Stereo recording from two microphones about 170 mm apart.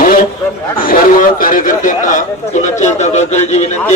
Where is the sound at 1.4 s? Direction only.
55° left (ahead or behind).